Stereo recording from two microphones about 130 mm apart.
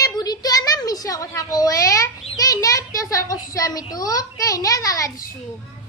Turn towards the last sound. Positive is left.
turn(degrees=25)  # may be behind; listen again after turning